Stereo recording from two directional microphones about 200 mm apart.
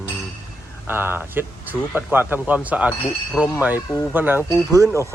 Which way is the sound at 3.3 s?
10° left (ahead or behind).